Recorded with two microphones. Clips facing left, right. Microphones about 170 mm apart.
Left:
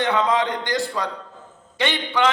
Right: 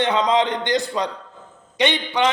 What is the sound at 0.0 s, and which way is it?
A man's voice, 20° right (ahead or behind).